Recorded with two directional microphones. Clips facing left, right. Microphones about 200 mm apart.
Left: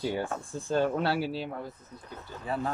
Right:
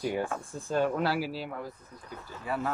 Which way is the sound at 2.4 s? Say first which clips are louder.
Even; 30° left (ahead or behind).